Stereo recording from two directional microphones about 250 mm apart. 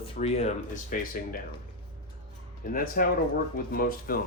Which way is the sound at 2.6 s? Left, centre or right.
Left.